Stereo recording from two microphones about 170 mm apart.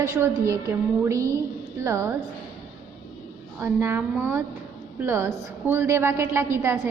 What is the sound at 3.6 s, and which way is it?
A woman's voice, 15° right (ahead or behind).